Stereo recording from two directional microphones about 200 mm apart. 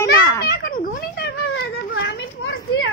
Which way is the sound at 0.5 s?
45° left (ahead or behind).